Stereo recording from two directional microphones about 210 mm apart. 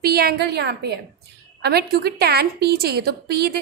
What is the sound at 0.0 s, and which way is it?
A woman's voice, 45° right (ahead or behind).